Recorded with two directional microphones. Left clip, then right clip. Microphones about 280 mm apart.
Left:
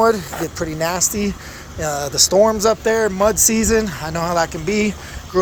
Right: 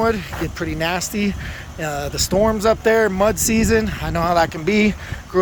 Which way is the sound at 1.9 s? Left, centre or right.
Centre.